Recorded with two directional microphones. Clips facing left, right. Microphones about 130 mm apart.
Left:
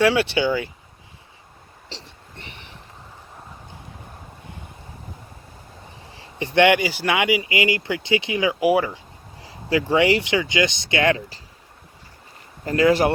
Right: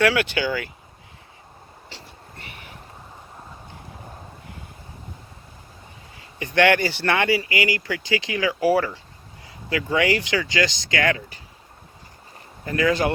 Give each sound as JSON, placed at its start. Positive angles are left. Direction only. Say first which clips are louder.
{"t": 0.0, "sound": "speech", "louder": "left 2 dB", "side_deg": 25}
{"t": 6.1, "sound": "speech", "louder": "left 2 dB", "side_deg": 25}
{"t": 9.4, "sound": "speech", "louder": "left 5 dB", "side_deg": 30}
{"t": 12.6, "sound": "speech", "louder": "left 4 dB", "side_deg": 25}